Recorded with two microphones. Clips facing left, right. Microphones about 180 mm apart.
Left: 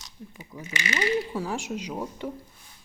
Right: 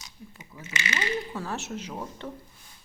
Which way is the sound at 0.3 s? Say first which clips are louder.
Left 2 dB; 15° left (ahead or behind).